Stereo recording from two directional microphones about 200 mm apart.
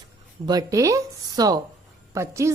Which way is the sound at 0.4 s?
15° right (ahead or behind).